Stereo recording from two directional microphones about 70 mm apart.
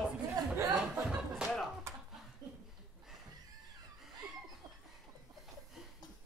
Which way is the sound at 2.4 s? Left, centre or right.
Right.